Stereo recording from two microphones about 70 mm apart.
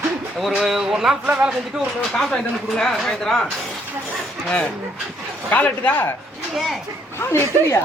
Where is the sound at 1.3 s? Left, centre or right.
Right.